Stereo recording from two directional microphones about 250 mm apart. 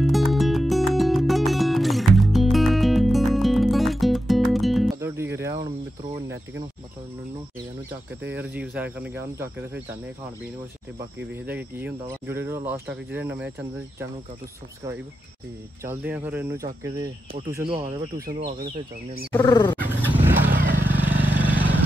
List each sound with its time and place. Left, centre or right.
0.0 s music: centre
5.0 s music: centre
6.2 s a sound: centre
8.3 s speech: centre
11.3 s speech: centre
15.8 s speech: centre
19.4 s roaring cats: centre
19.8 s vehicle: centre
20.5 s vehicle: right
20.8 s vehicle: centre